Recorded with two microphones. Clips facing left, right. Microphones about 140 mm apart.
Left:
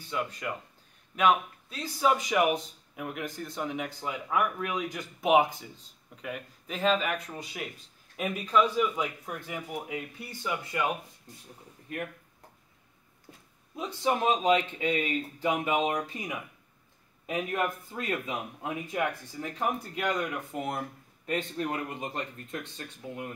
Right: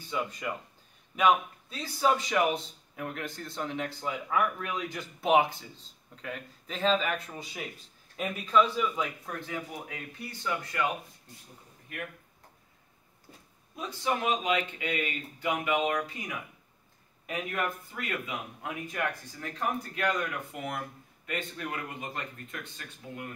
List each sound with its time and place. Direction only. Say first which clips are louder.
0.1 s a man's voice: even; centre (ahead or behind); by 10.9 s 15° left (ahead or behind)
13.7 s speech: left 3 dB; 20° left (ahead or behind)
14.4 s speech: left 5 dB; 30° left (ahead or behind)
17.5 s a man's voice: left 3 dB; 25° left (ahead or behind)